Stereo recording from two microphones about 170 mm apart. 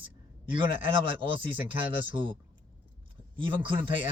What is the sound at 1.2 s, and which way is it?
Speech, 10° right (ahead or behind).